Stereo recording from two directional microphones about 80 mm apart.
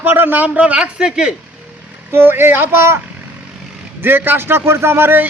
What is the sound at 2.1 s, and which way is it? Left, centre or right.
Speech, right.